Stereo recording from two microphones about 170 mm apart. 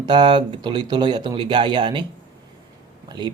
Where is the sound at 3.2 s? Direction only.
25° right (ahead or behind).